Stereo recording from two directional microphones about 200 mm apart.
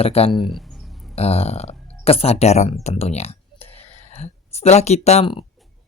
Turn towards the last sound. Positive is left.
turn(degrees=30)  # may be behind; listen again after turning